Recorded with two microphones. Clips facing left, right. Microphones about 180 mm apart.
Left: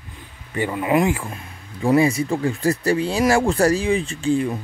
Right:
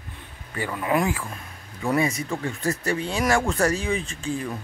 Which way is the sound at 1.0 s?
25° left (ahead or behind).